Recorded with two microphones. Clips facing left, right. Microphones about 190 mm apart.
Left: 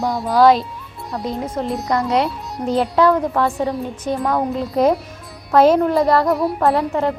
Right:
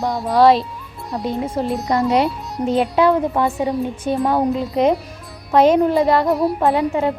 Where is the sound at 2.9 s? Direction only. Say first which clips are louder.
Left 2 dB; 25° right (ahead or behind).